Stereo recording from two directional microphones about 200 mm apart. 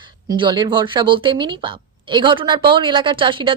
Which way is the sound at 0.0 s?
20° right (ahead or behind).